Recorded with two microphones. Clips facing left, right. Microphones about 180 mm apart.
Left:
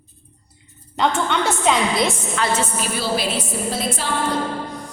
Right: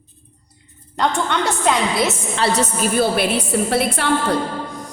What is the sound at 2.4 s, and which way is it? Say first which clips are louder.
A woman's voice: right 4 dB; 35° right (ahead or behind).